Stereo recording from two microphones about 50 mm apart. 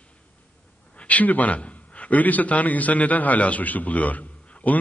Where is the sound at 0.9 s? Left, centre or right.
Left.